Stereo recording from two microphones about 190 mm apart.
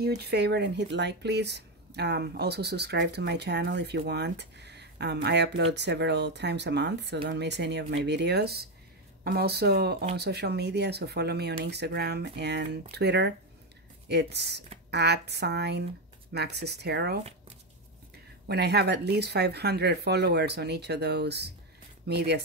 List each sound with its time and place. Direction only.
0.0 s speech: 60° right (ahead or behind)
18.5 s speech: 60° right (ahead or behind)